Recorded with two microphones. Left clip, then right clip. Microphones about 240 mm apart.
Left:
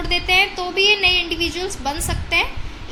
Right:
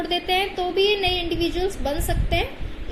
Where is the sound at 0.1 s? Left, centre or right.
Centre.